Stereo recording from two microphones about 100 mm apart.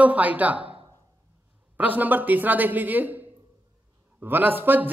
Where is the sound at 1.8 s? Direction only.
15° right (ahead or behind).